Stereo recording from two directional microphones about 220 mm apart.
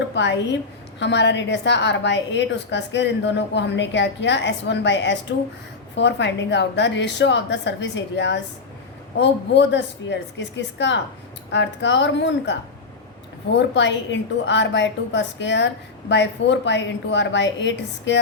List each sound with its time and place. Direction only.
0.1 s a woman's voice: 55° left (ahead or behind)
13.6 s a woman's voice: 55° left (ahead or behind)